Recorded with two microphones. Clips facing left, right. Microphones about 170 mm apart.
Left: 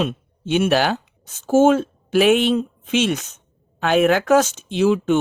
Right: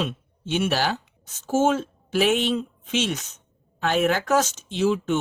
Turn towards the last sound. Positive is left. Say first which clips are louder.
# left 5 dB
turn(degrees=60)  # may be behind; listen again after turning